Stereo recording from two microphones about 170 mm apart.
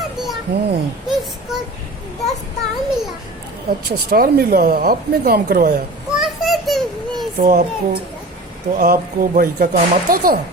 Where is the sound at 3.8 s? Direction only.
60° right (ahead or behind).